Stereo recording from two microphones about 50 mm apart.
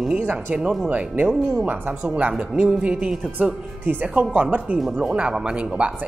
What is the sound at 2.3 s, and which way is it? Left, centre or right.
Speech, right.